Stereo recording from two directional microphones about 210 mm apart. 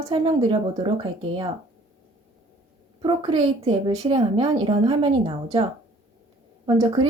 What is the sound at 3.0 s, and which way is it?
A woman's voice, 20° right (ahead or behind).